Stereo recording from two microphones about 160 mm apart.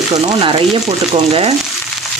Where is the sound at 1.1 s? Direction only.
40° right (ahead or behind).